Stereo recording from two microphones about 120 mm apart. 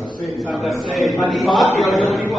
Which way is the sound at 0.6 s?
Centre (ahead or behind).